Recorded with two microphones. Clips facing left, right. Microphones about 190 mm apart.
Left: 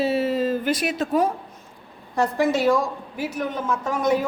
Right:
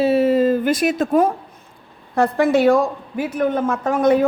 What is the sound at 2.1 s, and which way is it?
A woman's voice, 60° right (ahead or behind).